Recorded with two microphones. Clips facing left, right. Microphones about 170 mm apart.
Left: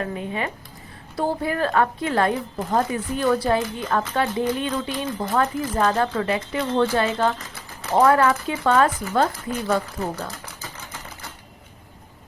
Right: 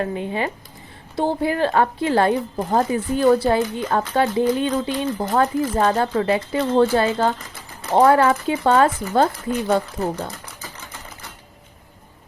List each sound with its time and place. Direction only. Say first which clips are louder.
0.0 s speech: right 4 dB; 30° right (ahead or behind)